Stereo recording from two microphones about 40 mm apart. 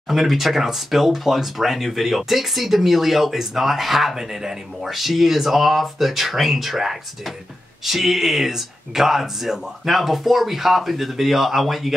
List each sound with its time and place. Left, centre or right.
0.1 s speech: centre